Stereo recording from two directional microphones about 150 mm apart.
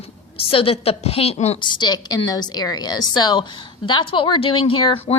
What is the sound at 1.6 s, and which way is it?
Speech, 30° left (ahead or behind).